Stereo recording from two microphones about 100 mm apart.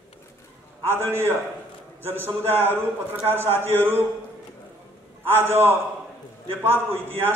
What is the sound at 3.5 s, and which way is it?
Speech, 20° left (ahead or behind).